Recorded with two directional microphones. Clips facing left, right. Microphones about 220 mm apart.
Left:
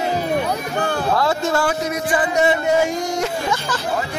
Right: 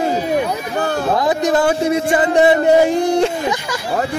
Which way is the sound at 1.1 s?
15° right (ahead or behind).